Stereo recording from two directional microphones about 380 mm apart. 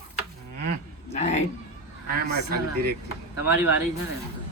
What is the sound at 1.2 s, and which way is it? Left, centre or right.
Speech, centre.